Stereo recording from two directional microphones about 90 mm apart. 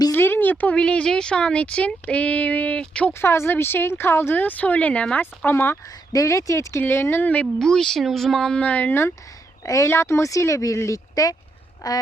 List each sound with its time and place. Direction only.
0.1 s speech: 25° left (ahead or behind)
3.1 s speech: 25° left (ahead or behind)
6.1 s speech: 35° left (ahead or behind); by 7.4 s 20° left (ahead or behind)
7.6 s speech: 5° left (ahead or behind)
8.6 s speech: 20° left (ahead or behind)
9.6 s speech: 35° left (ahead or behind)
11.8 s a sound: 45° left (ahead or behind)